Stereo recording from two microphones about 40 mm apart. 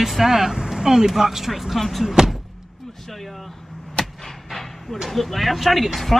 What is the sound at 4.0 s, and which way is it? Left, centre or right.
Vehicle, left.